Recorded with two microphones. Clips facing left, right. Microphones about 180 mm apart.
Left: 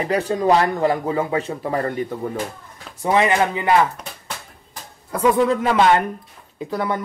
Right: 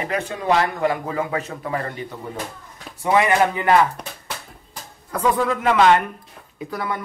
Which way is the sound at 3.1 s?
20° left (ahead or behind).